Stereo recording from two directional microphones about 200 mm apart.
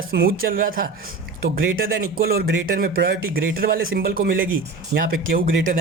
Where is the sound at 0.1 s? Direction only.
50° right (ahead or behind).